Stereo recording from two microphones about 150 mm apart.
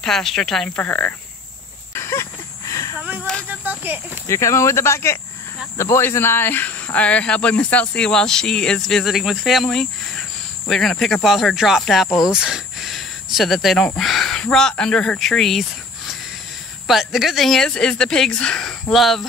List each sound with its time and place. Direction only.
0.0 s speech: centre (ahead or behind)
2.0 s a sound: 20° left (ahead or behind)
3.0 s a sound: 10° right (ahead or behind)
3.4 s speech: 10° right (ahead or behind)
4.3 s speech: 20° left (ahead or behind); by 15.6 s centre (ahead or behind)
16.8 s speech: centre (ahead or behind)